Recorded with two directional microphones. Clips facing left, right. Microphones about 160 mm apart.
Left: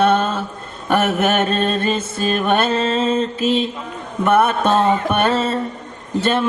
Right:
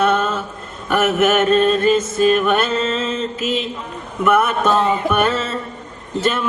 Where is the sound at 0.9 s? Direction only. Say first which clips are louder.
Right 1 dB; 30° left (ahead or behind).